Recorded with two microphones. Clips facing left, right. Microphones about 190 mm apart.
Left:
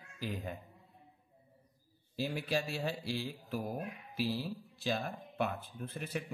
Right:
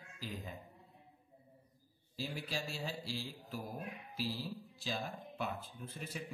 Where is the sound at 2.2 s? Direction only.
60° left (ahead or behind).